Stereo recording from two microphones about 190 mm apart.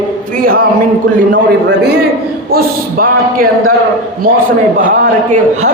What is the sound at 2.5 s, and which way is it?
A woman's voice, 50° right (ahead or behind).